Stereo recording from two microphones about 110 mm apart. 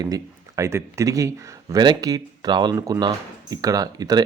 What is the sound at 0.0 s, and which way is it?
Speech, 30° right (ahead or behind).